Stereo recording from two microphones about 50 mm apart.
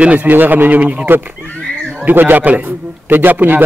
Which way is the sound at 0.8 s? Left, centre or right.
Right.